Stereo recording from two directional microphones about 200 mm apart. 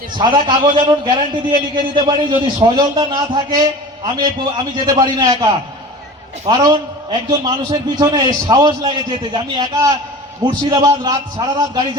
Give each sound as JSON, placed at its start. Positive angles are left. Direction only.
{"t": 0.2, "sound": "a man's voice", "side_deg": -25}
{"t": 6.5, "sound": "a man's voice", "side_deg": -20}